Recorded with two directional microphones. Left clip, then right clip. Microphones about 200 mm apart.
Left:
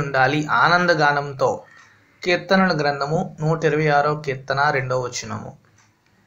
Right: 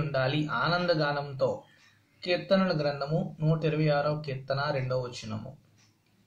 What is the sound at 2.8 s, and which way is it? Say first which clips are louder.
Speech: left 9 dB; 20° left (ahead or behind).